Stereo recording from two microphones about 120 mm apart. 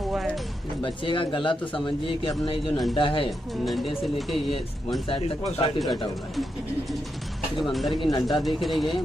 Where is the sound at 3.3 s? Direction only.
Centre (ahead or behind).